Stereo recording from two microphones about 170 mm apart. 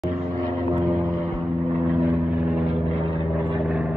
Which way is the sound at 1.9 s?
10° right (ahead or behind).